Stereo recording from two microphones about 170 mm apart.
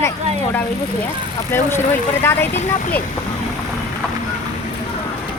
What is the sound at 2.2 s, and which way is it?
Speech, 15° left (ahead or behind).